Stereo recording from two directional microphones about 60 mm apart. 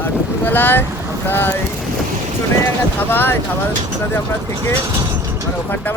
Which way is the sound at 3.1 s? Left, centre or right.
Left.